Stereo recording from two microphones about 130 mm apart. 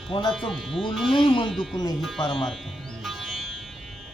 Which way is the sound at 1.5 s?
Centre (ahead or behind).